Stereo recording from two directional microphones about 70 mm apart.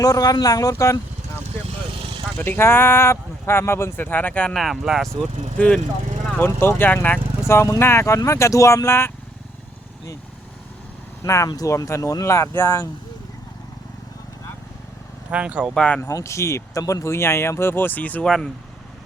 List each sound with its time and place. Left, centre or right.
0.0 s speech: left
2.4 s speech: left
4.4 s speech: centre
5.5 s speech: centre
6.4 s speech: left
7.4 s speech: left
11.2 s speech: left
15.3 s speech: centre
15.7 s speech: centre
16.1 s speech: left
18.3 s speech: centre